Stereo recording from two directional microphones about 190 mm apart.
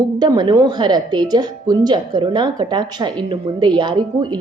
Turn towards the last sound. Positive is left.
turn(degrees=-25)  # may be behind; listen again after turning